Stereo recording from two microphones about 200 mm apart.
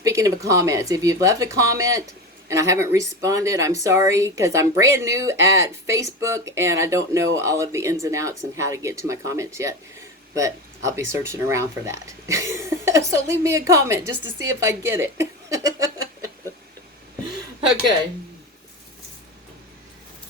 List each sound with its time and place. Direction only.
0.0 s speech: 15° right (ahead or behind)